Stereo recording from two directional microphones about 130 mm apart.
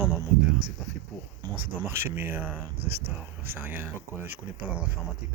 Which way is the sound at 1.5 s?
20° right (ahead or behind).